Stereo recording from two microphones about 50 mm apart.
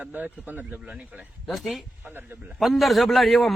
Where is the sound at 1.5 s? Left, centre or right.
Centre.